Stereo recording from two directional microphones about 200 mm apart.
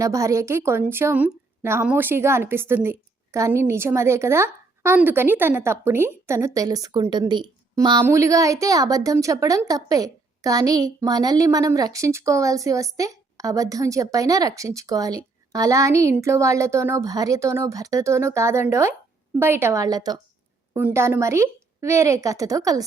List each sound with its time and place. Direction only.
0.0 s a woman's voice: 15° right (ahead or behind)